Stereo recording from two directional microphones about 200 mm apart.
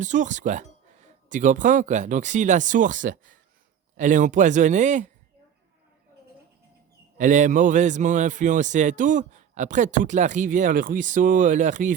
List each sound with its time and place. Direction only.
0.0 s a man's voice: 40° right (ahead or behind)
7.2 s a man's voice: 40° right (ahead or behind)